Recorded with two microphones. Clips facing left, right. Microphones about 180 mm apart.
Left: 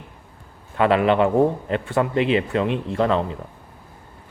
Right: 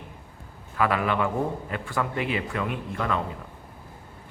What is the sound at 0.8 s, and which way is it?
A man's voice, 25° left (ahead or behind).